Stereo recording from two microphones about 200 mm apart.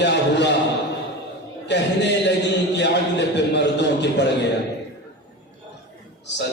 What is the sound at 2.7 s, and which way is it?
A man's voice, 60° left (ahead or behind).